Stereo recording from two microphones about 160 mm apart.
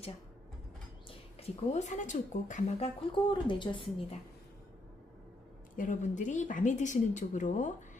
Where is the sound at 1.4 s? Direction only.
45° left (ahead or behind); by 3.8 s 30° left (ahead or behind).